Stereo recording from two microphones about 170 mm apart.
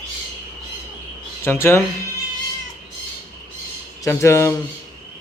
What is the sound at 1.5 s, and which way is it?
Speech, 15° left (ahead or behind).